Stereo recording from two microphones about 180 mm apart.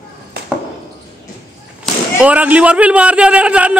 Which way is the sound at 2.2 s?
10° right (ahead or behind).